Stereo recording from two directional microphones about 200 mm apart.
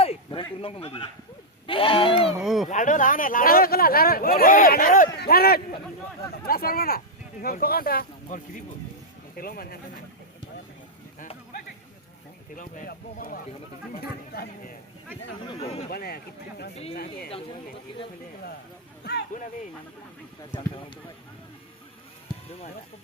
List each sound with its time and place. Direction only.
0.0 s sheep: 25° left (ahead or behind)
0.6 s speech: 30° left (ahead or behind)
2.4 s speech: centre (ahead or behind)
2.6 s speech: 40° left (ahead or behind)
11.2 s a sound: 40° left (ahead or behind)
12.5 s speech: 40° left (ahead or behind)
15.4 s speech: 30° left (ahead or behind)
15.9 s speech: 50° left (ahead or behind)
16.7 s speech: 30° left (ahead or behind)
20.5 s speech: 25° left (ahead or behind)